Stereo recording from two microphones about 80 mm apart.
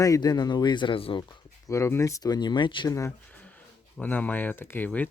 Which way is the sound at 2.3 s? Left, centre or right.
Left.